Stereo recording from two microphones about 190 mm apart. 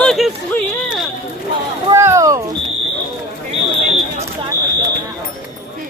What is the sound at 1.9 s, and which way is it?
Speech, 15° right (ahead or behind).